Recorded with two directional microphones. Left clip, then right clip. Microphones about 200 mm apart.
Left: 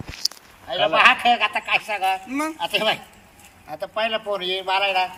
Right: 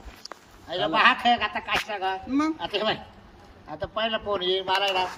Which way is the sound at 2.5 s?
5° right (ahead or behind).